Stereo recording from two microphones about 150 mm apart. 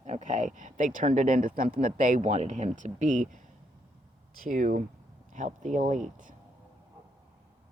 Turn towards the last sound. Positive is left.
turn(degrees=-55)  # may be behind; listen again after turning